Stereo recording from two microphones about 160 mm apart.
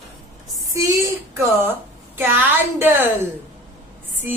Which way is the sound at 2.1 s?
15° right (ahead or behind).